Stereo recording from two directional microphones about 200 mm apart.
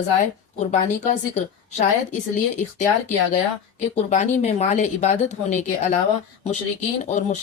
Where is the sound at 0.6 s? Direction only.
35° left (ahead or behind).